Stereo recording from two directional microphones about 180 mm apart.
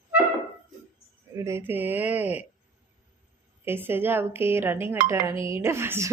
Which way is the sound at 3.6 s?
10° right (ahead or behind).